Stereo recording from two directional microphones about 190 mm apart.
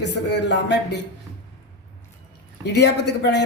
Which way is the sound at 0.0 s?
65° left (ahead or behind).